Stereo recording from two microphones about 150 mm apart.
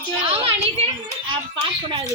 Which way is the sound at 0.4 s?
40° right (ahead or behind).